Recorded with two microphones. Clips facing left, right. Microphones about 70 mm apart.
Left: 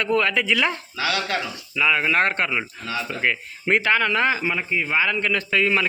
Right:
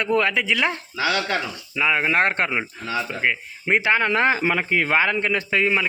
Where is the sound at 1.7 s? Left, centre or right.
Right.